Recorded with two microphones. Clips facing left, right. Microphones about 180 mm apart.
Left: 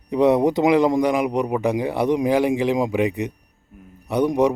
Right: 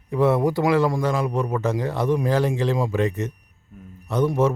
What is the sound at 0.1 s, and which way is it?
A man's voice, 20° left (ahead or behind).